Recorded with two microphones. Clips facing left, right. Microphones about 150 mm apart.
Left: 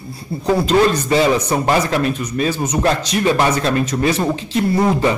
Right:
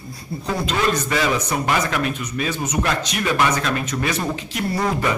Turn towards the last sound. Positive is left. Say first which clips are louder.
# left 6 dB
turn(degrees=25)  # may be behind; listen again after turning